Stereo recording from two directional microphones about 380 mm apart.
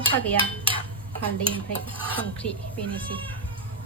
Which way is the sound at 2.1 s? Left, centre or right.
Centre.